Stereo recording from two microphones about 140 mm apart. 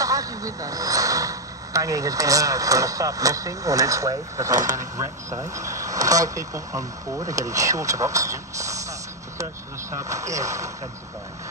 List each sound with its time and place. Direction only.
0.0 s speech: 25° right (ahead or behind)